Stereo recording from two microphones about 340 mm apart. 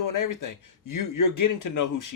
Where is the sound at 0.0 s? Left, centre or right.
Left.